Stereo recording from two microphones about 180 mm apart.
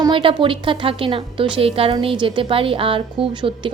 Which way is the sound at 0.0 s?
30° right (ahead or behind).